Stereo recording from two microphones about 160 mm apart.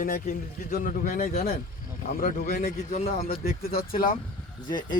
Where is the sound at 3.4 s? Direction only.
70° left (ahead or behind).